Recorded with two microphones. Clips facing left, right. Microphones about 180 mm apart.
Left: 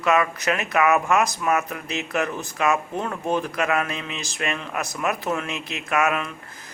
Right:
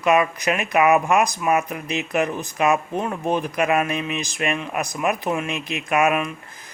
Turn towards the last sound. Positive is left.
turn(degrees=-15)  # may be behind; listen again after turning